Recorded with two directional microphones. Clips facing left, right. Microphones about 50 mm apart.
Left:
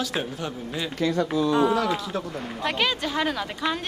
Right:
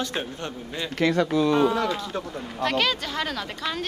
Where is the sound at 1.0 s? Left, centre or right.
Right.